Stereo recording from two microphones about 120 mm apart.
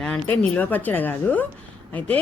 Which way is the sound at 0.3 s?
15° left (ahead or behind).